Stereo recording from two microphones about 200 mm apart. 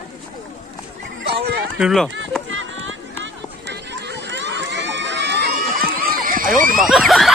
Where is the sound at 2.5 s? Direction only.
75° right (ahead or behind).